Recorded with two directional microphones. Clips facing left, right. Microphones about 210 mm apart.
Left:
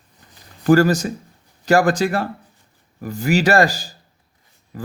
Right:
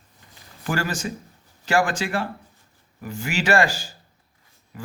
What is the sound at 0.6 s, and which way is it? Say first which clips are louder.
Speech: left 12 dB; 40° left (ahead or behind).